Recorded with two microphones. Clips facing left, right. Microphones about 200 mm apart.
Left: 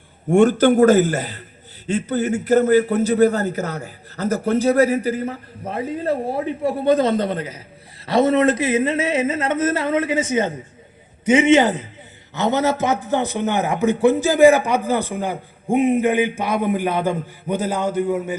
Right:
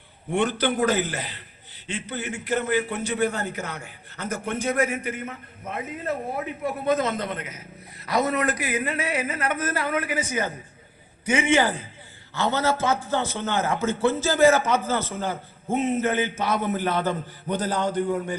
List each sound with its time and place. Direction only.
0.3 s a man's voice: 45° left (ahead or behind); by 18.3 s 5° left (ahead or behind)